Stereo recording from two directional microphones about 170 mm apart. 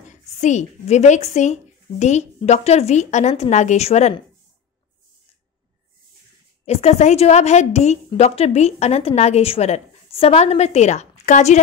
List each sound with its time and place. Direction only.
0.1 s a woman's voice: 45° left (ahead or behind)
6.6 s a woman's voice: 40° left (ahead or behind)